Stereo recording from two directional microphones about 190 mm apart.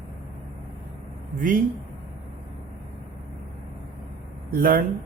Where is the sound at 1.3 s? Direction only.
45° right (ahead or behind).